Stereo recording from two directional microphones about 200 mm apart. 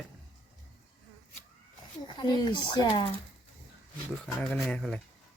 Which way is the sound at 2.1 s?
20° left (ahead or behind).